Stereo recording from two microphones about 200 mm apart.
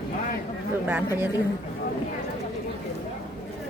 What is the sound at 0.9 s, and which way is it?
Speech, 10° right (ahead or behind).